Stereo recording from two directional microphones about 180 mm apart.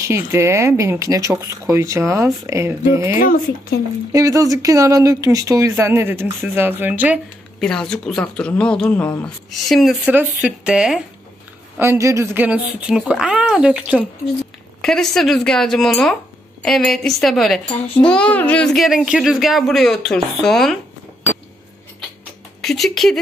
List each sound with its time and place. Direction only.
0.0 s speech: 15° right (ahead or behind)
7.6 s a woman's voice: 5° left (ahead or behind)
11.8 s a woman's voice: 15° right (ahead or behind); by 20.7 s centre (ahead or behind)
22.6 s speech: centre (ahead or behind)